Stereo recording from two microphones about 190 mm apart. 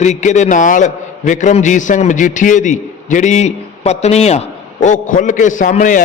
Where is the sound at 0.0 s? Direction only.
40° left (ahead or behind).